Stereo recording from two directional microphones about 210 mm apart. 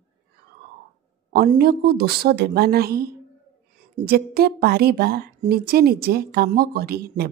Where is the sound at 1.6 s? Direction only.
50° right (ahead or behind).